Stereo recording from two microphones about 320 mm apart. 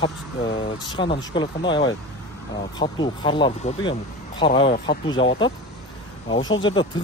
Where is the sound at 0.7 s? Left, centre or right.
Centre.